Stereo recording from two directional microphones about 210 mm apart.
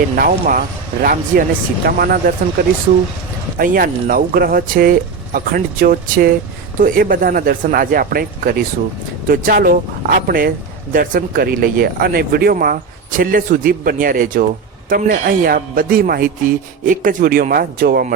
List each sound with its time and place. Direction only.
0.2 s speech: 45° right (ahead or behind)
3.6 s speech: 40° right (ahead or behind)